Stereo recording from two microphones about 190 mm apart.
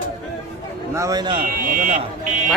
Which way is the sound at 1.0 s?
20° right (ahead or behind).